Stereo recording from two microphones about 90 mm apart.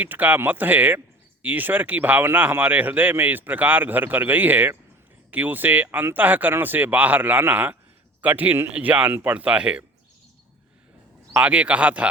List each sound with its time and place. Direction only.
0.0 s speech: 20° right (ahead or behind)
11.3 s speech: 15° right (ahead or behind)